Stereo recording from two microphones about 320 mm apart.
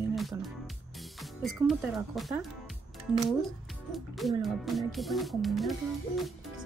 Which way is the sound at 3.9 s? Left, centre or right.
Centre.